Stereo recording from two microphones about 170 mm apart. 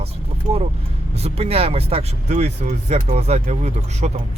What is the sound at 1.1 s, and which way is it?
Speech, 35° right (ahead or behind).